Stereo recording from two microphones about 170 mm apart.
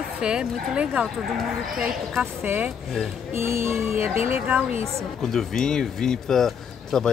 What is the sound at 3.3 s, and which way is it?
A woman's voice, 15° right (ahead or behind).